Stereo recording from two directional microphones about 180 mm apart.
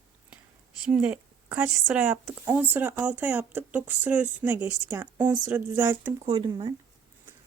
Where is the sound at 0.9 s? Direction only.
10° right (ahead or behind).